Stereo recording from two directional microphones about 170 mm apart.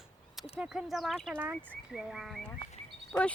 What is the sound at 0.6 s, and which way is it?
Speech, 5° right (ahead or behind).